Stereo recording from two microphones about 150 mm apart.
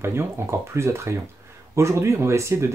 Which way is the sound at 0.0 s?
15° right (ahead or behind).